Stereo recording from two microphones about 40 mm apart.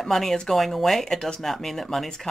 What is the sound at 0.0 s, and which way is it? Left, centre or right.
A woman's voice, centre.